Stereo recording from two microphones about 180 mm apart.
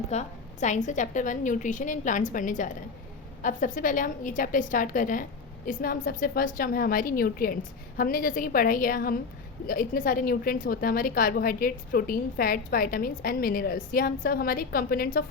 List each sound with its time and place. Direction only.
0.1 s a woman's voice: 40° left (ahead or behind)